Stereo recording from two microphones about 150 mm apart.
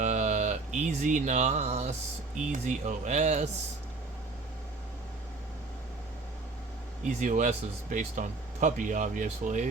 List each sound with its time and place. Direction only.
0.0 s music: 50° right (ahead or behind)
2.5 s speech: 55° right (ahead or behind)
7.2 s speech: 60° right (ahead or behind)